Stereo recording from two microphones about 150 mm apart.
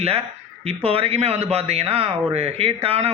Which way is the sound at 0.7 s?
40° right (ahead or behind).